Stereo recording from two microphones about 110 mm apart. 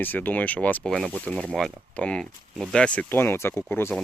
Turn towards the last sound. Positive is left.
turn(degrees=20)  # may be behind; listen again after turning